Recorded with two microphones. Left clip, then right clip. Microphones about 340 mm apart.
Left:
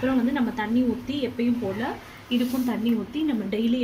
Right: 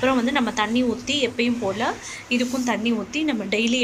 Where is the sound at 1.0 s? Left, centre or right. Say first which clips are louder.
Right 6 dB; centre.